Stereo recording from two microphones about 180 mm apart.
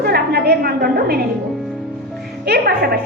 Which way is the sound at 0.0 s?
60° right (ahead or behind).